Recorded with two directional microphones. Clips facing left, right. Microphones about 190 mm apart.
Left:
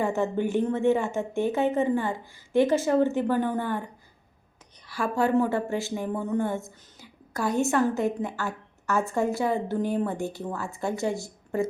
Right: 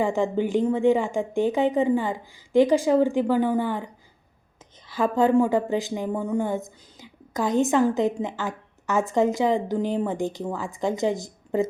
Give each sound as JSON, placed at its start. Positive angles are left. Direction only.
{"t": 0.0, "sound": "speech", "side_deg": -15}
{"t": 4.9, "sound": "speech", "side_deg": -20}